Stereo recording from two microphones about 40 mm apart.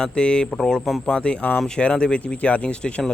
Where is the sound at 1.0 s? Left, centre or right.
Left.